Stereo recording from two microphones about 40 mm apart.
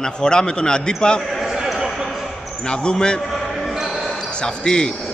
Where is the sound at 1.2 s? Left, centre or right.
Centre.